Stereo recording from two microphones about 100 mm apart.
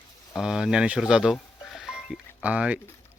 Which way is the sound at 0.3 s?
5° right (ahead or behind).